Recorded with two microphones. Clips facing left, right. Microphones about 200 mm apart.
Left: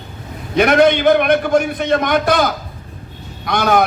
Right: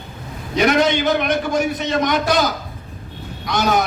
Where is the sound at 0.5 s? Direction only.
55° left (ahead or behind).